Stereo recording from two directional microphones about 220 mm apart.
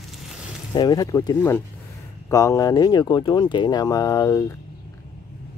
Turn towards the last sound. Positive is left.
turn(degrees=15)  # may be behind; listen again after turning